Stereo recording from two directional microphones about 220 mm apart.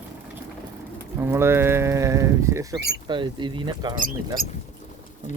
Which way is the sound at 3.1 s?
20° right (ahead or behind).